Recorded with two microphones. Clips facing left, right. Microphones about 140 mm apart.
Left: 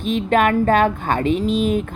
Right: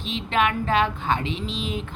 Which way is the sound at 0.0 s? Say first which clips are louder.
Left 7 dB; 50° left (ahead or behind).